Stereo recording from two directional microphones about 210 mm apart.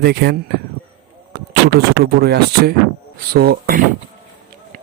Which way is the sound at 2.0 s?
50° right (ahead or behind).